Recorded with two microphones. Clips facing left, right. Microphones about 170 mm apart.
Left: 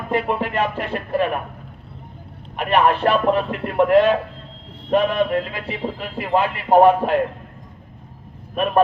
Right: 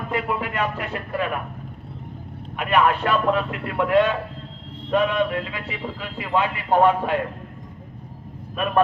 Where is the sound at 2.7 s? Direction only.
30° left (ahead or behind).